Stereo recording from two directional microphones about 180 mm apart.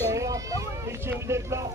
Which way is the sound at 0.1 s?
20° right (ahead or behind).